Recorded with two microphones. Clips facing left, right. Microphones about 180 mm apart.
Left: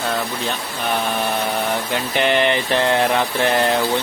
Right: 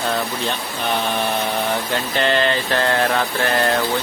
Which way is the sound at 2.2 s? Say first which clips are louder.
Left 2 dB; 15° left (ahead or behind).